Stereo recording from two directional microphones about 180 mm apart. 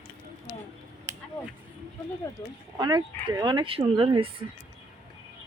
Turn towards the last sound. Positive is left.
turn(degrees=-30)  # may be behind; listen again after turning